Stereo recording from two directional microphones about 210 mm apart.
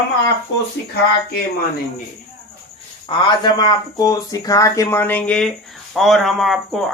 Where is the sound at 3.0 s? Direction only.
20° left (ahead or behind).